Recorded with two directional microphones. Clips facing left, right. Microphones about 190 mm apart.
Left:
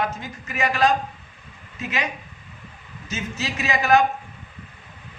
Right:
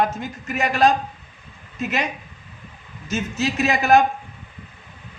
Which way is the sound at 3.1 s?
50° right (ahead or behind).